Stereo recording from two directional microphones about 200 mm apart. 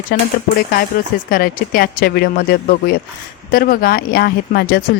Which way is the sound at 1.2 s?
45° left (ahead or behind).